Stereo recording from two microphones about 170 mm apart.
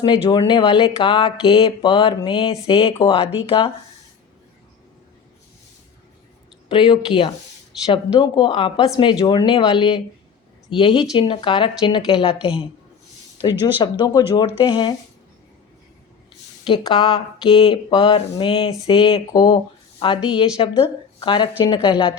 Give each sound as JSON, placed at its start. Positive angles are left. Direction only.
{"t": 0.0, "sound": "speech", "side_deg": 25}
{"t": 6.7, "sound": "speech", "side_deg": 30}
{"t": 13.7, "sound": "speech", "side_deg": 25}
{"t": 16.6, "sound": "speech", "side_deg": 25}